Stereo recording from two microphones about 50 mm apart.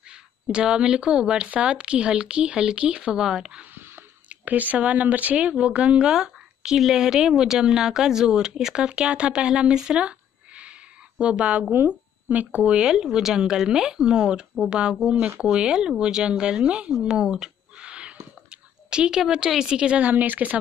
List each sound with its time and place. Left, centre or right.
0.1 s speech: centre
3.7 s a sound: right
4.3 s speech: right
12.3 s speech: right
12.6 s speech: centre
15.0 s speech: right
15.4 s speech: centre
17.0 s whispering: centre
19.6 s speech: centre
20.0 s speech: right